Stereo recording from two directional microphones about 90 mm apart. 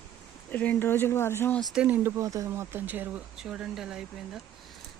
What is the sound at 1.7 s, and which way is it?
Speech, 15° right (ahead or behind).